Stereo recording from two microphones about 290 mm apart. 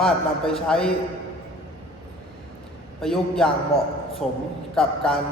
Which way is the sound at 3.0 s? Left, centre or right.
Centre.